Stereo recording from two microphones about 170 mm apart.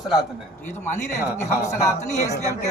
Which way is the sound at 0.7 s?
45° left (ahead or behind).